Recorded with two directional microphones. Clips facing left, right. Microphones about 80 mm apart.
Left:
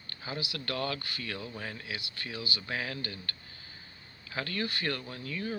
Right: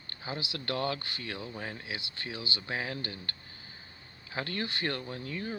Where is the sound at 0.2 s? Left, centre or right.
Right.